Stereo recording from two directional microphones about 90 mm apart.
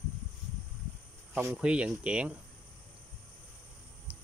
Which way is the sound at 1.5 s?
10° right (ahead or behind).